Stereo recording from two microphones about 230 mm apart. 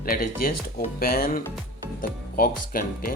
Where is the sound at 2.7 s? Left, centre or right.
Left.